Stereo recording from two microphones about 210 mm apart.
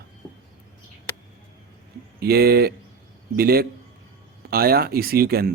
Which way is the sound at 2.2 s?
45° right (ahead or behind).